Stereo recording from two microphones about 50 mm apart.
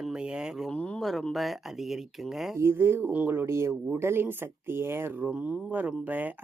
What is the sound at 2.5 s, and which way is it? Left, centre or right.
Speech, right.